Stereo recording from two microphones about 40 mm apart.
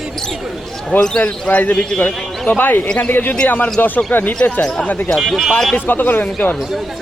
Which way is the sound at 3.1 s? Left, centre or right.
Left.